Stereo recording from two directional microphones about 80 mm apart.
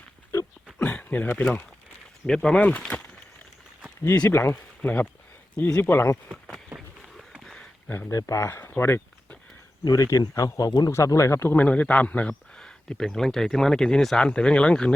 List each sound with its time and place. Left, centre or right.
0.8 s a sound: centre
2.2 s speech: centre
4.3 s speech: left
7.4 s a sound: centre
7.9 s speech: left
8.1 s speech: left
9.8 s speech: left
10.7 s speech: left
10.9 s speech: left; by 14.9 s centre